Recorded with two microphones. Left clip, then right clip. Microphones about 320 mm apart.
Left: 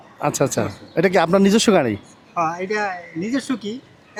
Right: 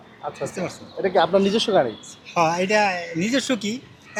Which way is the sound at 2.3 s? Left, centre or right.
Centre.